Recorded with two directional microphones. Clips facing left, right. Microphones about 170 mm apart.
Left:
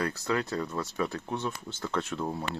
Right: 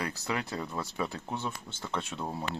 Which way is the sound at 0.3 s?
10° right (ahead or behind).